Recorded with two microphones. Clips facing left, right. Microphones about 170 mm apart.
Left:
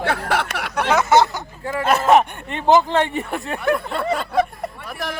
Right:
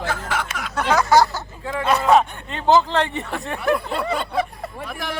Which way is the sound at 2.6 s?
15° left (ahead or behind).